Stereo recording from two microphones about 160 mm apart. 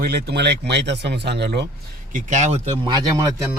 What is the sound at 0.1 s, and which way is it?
Speech, 90° right.